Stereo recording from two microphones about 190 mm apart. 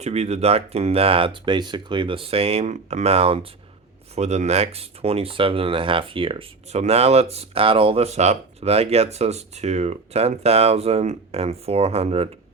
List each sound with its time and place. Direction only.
0.0 s speech: 35° right (ahead or behind)